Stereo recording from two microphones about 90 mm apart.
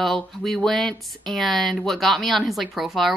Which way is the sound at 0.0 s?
5° left (ahead or behind).